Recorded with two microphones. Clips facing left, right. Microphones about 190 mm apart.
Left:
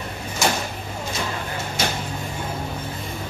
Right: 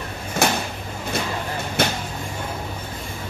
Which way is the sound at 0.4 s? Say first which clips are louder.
Right 2 dB; 60° right (ahead or behind).